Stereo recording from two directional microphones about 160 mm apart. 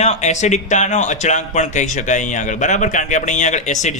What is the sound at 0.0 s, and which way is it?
Speech, 45° left (ahead or behind).